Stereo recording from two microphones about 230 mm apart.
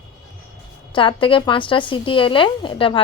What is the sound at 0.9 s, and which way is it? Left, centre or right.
A woman's voice, left.